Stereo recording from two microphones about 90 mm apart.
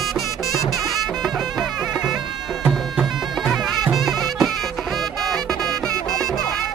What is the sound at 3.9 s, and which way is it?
Music, centre (ahead or behind).